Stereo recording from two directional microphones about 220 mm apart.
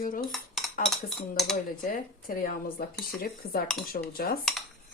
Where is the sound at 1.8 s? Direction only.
40° left (ahead or behind).